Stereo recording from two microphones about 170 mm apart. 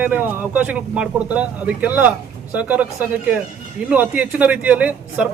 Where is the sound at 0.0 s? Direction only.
10° right (ahead or behind).